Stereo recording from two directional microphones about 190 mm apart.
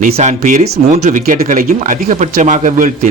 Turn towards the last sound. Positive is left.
turn(degrees=-45)  # may be behind; listen again after turning